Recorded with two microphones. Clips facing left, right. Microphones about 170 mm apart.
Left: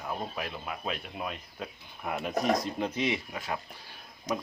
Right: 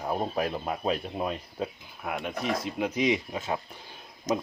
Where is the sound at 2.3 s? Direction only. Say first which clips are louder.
Left 5 dB; 40° left (ahead or behind).